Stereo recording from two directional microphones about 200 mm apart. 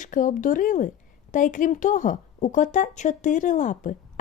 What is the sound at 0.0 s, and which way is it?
A woman's voice, 40° left (ahead or behind).